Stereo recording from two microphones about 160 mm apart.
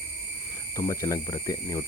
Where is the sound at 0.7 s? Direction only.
20° left (ahead or behind).